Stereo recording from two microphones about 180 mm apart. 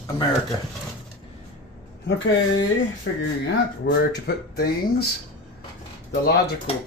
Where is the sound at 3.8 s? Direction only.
70° left (ahead or behind).